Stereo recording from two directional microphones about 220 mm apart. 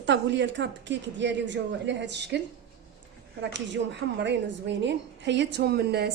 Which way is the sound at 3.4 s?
55° right (ahead or behind).